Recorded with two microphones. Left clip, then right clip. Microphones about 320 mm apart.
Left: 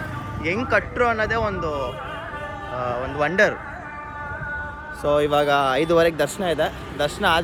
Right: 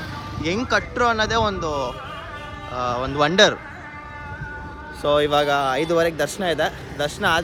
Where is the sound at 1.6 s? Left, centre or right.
Right.